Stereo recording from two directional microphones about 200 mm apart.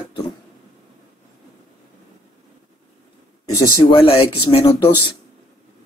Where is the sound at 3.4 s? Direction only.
15° left (ahead or behind).